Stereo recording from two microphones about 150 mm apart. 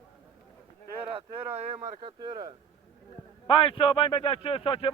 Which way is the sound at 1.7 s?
50° right (ahead or behind).